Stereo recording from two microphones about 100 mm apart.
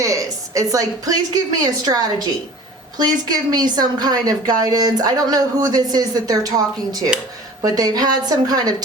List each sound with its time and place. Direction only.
0.0 s a woman's voice: 35° right (ahead or behind)